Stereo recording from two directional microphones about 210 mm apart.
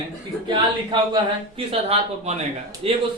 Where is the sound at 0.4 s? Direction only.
20° right (ahead or behind).